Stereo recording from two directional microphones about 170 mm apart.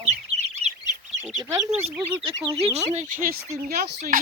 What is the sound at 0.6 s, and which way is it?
Goose, 40° right (ahead or behind).